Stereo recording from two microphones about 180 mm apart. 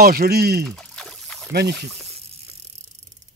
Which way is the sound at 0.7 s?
5° left (ahead or behind).